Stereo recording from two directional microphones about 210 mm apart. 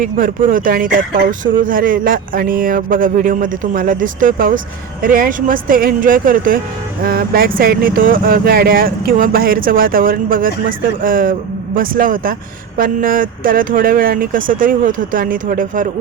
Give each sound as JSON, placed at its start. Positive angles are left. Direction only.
{"t": 0.0, "sound": "speech", "side_deg": -40}